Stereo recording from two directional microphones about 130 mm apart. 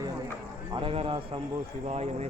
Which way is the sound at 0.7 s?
45° right (ahead or behind).